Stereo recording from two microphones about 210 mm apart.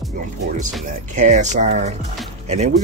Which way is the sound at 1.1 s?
35° right (ahead or behind).